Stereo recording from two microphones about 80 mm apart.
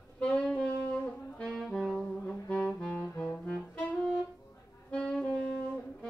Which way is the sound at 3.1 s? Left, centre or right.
Centre.